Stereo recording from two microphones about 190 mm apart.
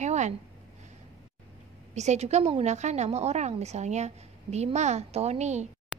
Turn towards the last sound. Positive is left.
turn(degrees=-35)  # may be behind; listen again after turning